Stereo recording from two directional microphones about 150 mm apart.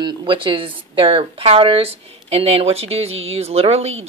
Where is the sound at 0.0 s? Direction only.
30° right (ahead or behind).